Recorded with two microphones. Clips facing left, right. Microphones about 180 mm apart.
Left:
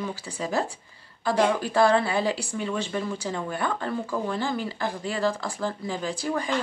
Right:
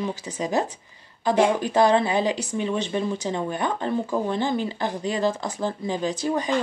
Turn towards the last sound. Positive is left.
turn(degrees=-20)  # may be behind; listen again after turning